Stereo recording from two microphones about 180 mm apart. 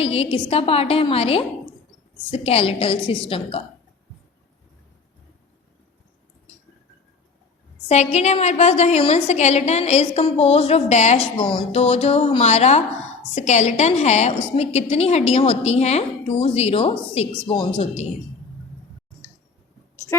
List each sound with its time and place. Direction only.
0.0 s a woman's voice: 35° left (ahead or behind)
7.9 s a woman's voice: 40° left (ahead or behind)